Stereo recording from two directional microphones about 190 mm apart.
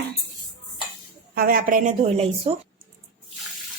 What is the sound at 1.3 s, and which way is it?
A woman's voice, 50° right (ahead or behind).